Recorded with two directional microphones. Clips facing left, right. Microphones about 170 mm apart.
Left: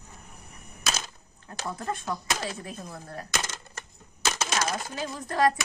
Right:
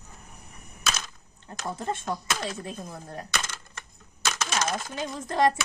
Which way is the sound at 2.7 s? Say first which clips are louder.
Right 1 dB; 15° right (ahead or behind).